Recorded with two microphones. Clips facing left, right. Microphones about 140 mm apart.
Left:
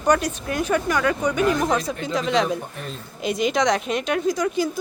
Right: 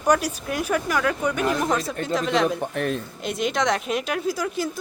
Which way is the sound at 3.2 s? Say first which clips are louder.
Left 5 dB; centre (ahead or behind).